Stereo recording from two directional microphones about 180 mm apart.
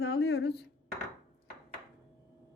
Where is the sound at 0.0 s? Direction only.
65° left (ahead or behind).